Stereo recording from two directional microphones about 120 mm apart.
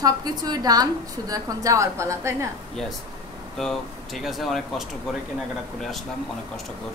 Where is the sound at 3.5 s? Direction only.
Centre (ahead or behind).